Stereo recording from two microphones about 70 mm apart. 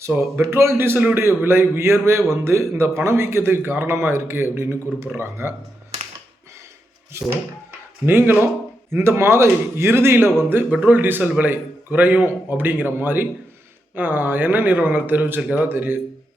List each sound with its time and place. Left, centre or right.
0.1 s a man's voice: right
7.1 s a man's voice: right